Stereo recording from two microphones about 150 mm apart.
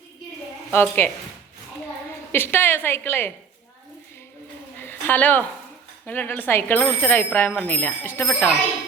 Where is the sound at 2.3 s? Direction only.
15° left (ahead or behind).